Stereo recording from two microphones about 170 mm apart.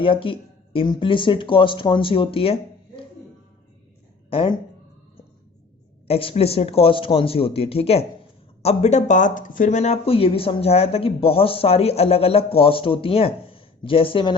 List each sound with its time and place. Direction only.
0.0 s speech: 30° left (ahead or behind)
4.3 s speech: 30° left (ahead or behind)
6.1 s speech: 35° left (ahead or behind)